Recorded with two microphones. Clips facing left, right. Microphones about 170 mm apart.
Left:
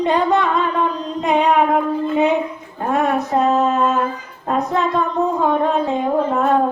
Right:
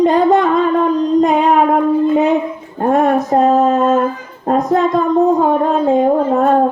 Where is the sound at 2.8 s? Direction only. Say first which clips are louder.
Right 6 dB; 45° right (ahead or behind).